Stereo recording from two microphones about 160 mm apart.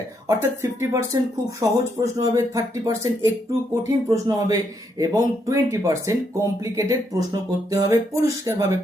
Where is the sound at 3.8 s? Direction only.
20° right (ahead or behind).